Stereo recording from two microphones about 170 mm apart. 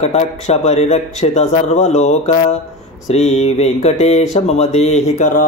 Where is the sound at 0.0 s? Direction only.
40° left (ahead or behind).